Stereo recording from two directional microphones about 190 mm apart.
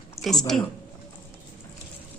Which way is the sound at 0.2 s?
15° left (ahead or behind).